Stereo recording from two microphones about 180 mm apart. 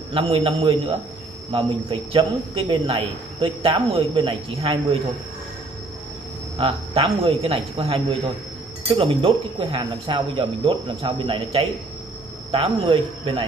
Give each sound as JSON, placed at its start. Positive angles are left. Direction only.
{"t": 0.1, "sound": "speech", "side_deg": -30}
{"t": 6.6, "sound": "speech", "side_deg": -30}